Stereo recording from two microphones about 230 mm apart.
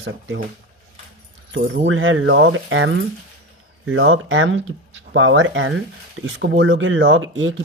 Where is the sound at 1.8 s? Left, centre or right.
Right.